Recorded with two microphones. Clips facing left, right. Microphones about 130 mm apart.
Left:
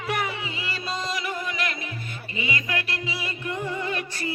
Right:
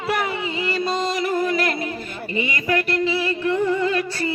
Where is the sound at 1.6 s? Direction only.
65° right (ahead or behind).